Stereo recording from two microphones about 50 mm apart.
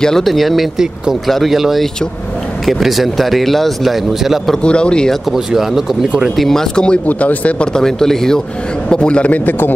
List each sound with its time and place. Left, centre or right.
0.0 s speech: centre
4.6 s a man's voice: centre
5.3 s speech: centre
6.3 s speech: centre
7.1 s a man's voice: left
7.7 s speech: centre
8.8 s a man's voice: centre
9.5 s a man's voice: left